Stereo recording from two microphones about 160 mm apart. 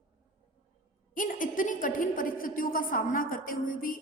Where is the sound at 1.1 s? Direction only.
55° left (ahead or behind).